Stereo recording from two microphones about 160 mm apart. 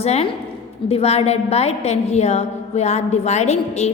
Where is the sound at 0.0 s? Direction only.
40° left (ahead or behind).